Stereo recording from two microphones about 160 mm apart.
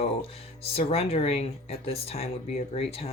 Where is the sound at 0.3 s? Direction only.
40° left (ahead or behind).